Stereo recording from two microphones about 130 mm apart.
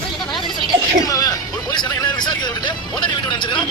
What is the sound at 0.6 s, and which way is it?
Speech, 25° left (ahead or behind).